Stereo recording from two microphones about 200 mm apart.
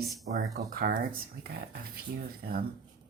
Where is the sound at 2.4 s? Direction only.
50° right (ahead or behind).